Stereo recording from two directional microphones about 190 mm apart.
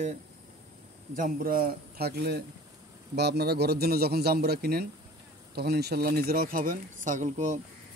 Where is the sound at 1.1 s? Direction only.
50° right (ahead or behind).